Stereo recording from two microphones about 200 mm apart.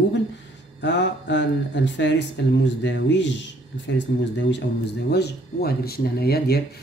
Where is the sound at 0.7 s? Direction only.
60° left (ahead or behind).